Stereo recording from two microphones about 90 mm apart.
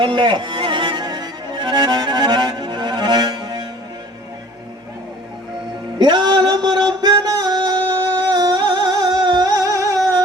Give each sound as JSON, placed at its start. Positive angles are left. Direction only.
{"t": 0.0, "sound": "music", "side_deg": -65}
{"t": 6.0, "sound": "music", "side_deg": -60}